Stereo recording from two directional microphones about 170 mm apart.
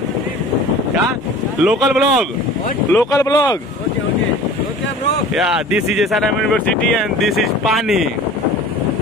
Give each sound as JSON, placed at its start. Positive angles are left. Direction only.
{"t": 1.6, "sound": "speech", "side_deg": 0}
{"t": 2.9, "sound": "speech", "side_deg": 15}
{"t": 5.3, "sound": "speech", "side_deg": -5}